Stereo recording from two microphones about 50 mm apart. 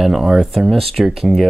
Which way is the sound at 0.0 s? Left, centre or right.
Centre.